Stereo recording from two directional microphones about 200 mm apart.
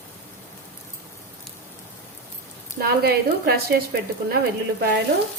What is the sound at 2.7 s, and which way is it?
Speech, 50° right (ahead or behind).